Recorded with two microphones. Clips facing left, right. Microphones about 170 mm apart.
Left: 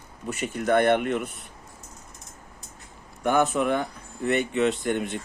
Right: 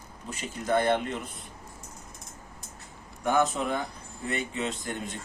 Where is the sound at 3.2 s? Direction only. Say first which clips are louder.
Left 3 dB; 60° left (ahead or behind).